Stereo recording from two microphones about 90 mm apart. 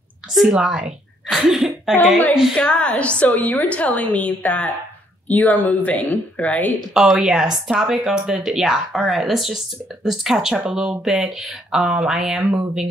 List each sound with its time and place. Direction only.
0.5 s speech: 10° right (ahead or behind)
2.5 s a woman's voice: 10° left (ahead or behind)
6.9 s speech: 5° right (ahead or behind)